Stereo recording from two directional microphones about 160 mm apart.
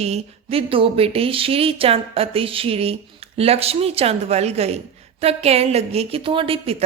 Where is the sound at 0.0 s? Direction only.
40° right (ahead or behind).